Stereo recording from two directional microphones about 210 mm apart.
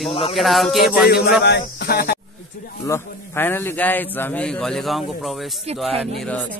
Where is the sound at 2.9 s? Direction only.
10° left (ahead or behind).